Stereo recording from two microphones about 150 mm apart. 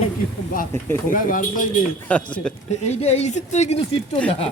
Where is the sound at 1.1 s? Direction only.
60° left (ahead or behind).